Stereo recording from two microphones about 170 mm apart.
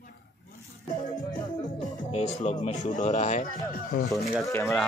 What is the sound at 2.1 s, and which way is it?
Speech, 40° left (ahead or behind).